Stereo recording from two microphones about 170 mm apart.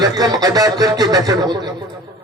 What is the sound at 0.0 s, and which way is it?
Speech, 25° right (ahead or behind).